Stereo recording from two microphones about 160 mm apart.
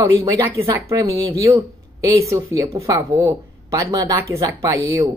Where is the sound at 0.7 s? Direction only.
20° right (ahead or behind).